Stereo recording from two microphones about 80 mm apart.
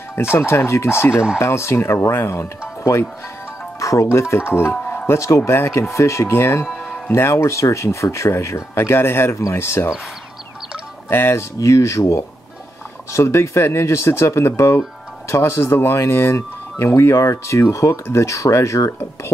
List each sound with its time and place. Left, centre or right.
0.1 s speech: left
11.1 s speech: left
11.5 s speech: left